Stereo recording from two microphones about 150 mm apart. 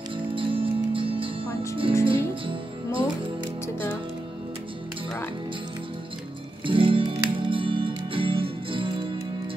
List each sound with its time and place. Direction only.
0.3 s music: 35° right (ahead or behind)
1.5 s music: 20° left (ahead or behind)
2.0 s music: 35° right (ahead or behind)
6.6 s music: 35° right (ahead or behind)